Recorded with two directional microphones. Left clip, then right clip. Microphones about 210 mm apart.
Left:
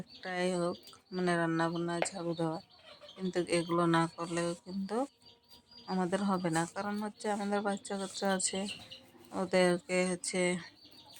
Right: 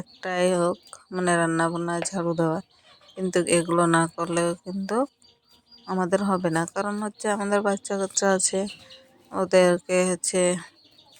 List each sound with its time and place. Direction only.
0.2 s speech: 40° right (ahead or behind)